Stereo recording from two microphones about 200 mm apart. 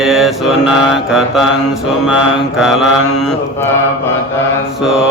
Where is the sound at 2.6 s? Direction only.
Centre (ahead or behind).